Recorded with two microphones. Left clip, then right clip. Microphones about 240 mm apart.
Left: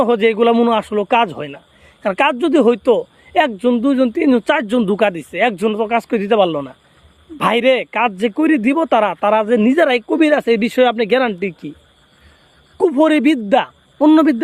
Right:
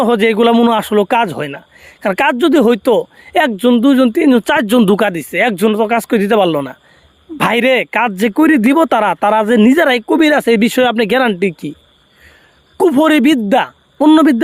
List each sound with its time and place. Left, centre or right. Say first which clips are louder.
0.0 s speech: right 2 dB; right
12.7 s speech: right 3 dB; right